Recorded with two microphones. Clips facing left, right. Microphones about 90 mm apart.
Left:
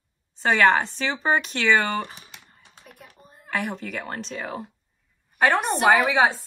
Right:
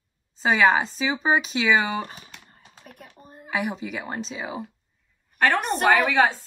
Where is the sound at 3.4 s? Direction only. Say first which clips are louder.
Right 1 dB; 5° right (ahead or behind).